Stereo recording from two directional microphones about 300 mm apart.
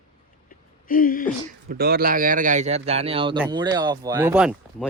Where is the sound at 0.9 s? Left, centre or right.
Left.